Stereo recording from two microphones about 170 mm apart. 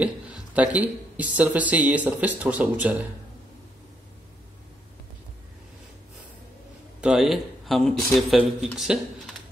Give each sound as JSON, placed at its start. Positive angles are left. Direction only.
{"t": 0.0, "sound": "speech", "side_deg": -10}
{"t": 7.0, "sound": "speech", "side_deg": -5}